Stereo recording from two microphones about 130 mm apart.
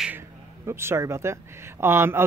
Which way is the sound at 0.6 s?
20° right (ahead or behind).